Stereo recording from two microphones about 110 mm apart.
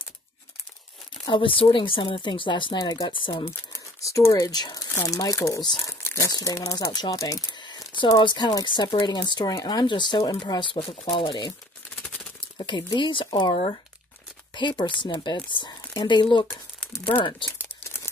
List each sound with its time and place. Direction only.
1.3 s a woman's voice: 55° left (ahead or behind)
3.7 s speech: 30° left (ahead or behind)
6.0 s crumpling: 25° left (ahead or behind)
6.3 s a woman's voice: 30° left (ahead or behind); by 11.5 s 50° left (ahead or behind)
12.5 s a woman's voice: 45° left (ahead or behind)